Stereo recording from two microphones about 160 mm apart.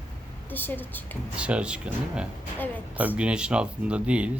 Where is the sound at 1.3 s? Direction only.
5° right (ahead or behind).